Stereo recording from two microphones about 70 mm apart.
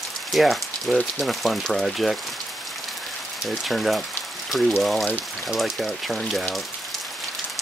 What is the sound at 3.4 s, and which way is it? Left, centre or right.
Speech, centre.